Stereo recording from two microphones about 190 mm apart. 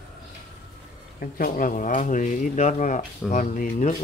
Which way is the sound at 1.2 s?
45° left (ahead or behind).